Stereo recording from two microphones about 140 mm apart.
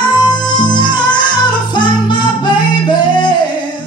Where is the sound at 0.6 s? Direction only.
30° left (ahead or behind).